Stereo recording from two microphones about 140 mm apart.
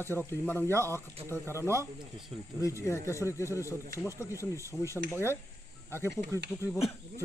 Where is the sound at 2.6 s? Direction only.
20° left (ahead or behind).